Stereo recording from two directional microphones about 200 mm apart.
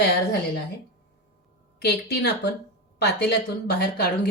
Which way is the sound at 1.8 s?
55° left (ahead or behind).